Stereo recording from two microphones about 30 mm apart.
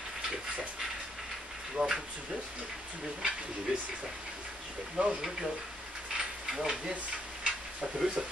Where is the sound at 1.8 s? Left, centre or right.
Right.